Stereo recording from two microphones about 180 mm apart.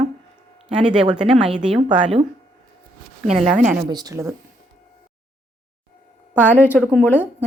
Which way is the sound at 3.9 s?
20° right (ahead or behind).